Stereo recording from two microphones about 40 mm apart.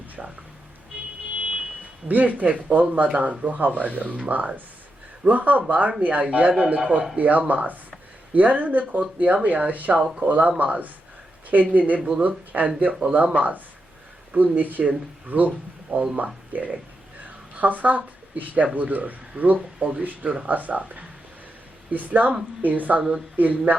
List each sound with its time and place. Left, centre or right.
0.2 s speech: right
2.0 s a woman's voice: right
7.2 s a woman's voice: right
11.9 s speech: right
12.2 s a woman's voice: right